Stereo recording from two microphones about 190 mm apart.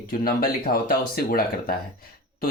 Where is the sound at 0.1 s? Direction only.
50° left (ahead or behind).